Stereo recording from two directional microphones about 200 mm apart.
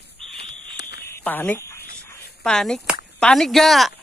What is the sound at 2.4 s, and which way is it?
Speech, 5° left (ahead or behind).